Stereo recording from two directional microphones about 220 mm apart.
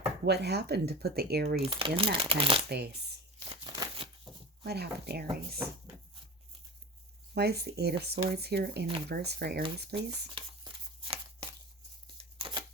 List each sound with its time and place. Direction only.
0.3 s speech: 50° right (ahead or behind)
1.6 s speech: 25° right (ahead or behind)
2.6 s speech: 50° right (ahead or behind)
3.5 s a sound: 20° right (ahead or behind)
4.6 s speech: 45° right (ahead or behind)
7.3 s speech: 50° right (ahead or behind)
10.3 s a sound: 20° right (ahead or behind)